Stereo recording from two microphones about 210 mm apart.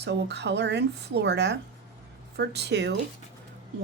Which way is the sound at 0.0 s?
55° right (ahead or behind).